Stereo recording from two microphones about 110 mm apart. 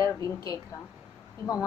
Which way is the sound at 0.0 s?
30° left (ahead or behind).